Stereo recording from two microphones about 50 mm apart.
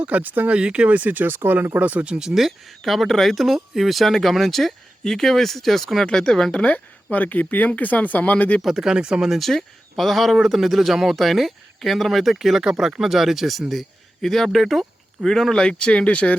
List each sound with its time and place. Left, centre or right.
0.0 s speech: right
0.5 s speech: right
1.8 s speech: right
2.1 s speech: centre
6.6 s speech: left
8.6 s speech: centre
9.3 s speech: centre; by 16.3 s left